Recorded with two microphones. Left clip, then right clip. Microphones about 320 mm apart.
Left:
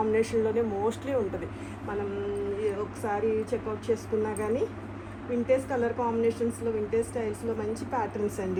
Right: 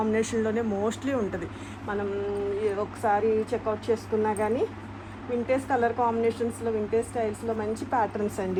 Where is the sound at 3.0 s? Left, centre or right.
Right.